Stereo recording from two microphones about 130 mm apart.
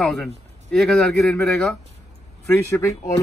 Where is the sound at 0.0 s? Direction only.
5° left (ahead or behind).